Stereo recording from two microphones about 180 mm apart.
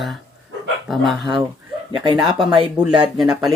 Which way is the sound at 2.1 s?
5° right (ahead or behind).